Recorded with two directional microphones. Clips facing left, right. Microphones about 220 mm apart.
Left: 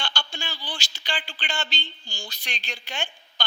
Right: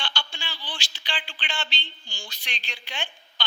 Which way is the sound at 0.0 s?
45° left (ahead or behind).